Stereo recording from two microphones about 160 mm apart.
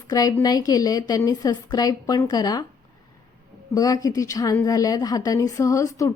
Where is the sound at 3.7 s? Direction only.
20° left (ahead or behind).